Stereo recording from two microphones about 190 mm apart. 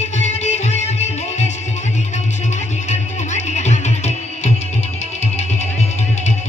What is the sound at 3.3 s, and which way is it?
Music, 35° left (ahead or behind).